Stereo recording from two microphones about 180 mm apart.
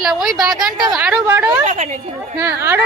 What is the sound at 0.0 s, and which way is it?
A woman's voice, centre (ahead or behind).